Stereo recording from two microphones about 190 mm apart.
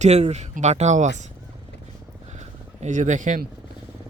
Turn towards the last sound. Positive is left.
turn(degrees=-40)  # may be behind; listen again after turning